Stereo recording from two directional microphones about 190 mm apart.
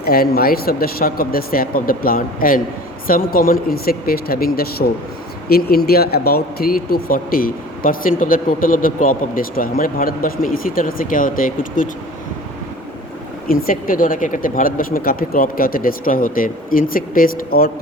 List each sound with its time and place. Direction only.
0.0 s speech: 55° left (ahead or behind)
13.5 s speech: 50° left (ahead or behind)